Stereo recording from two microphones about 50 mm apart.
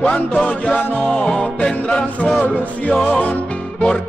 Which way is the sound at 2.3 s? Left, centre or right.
Left.